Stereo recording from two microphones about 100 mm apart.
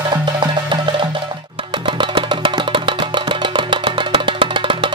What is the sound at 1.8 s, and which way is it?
Music, 55° right (ahead or behind).